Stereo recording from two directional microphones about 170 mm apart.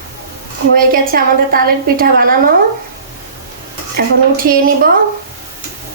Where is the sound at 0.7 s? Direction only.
55° right (ahead or behind).